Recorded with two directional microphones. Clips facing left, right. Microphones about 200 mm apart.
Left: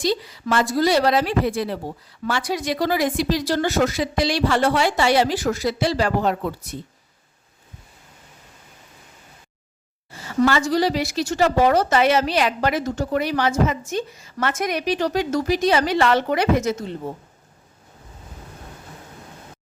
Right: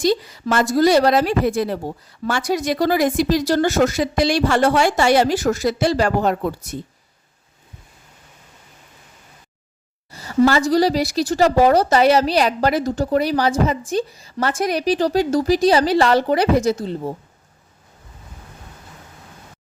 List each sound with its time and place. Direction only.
0.0 s speech: 45° right (ahead or behind)
10.1 s a woman's voice: 40° right (ahead or behind)